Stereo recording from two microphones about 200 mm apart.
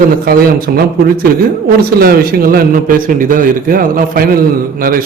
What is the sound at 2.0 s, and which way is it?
A man's voice, 50° right (ahead or behind).